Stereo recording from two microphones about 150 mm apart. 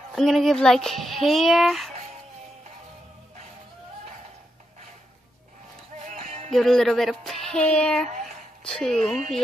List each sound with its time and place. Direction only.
0.1 s speech: centre (ahead or behind)
6.0 s music: 50° right (ahead or behind)
6.5 s speech: centre (ahead or behind)